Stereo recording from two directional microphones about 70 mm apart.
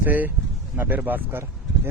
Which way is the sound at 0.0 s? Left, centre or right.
Right.